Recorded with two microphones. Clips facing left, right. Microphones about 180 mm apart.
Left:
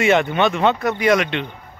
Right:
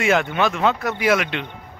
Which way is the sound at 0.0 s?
Centre (ahead or behind).